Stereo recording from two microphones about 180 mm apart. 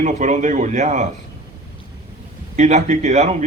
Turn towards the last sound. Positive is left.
turn(degrees=-40)  # may be behind; listen again after turning